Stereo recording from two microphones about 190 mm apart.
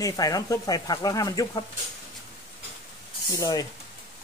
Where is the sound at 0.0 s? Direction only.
20° left (ahead or behind).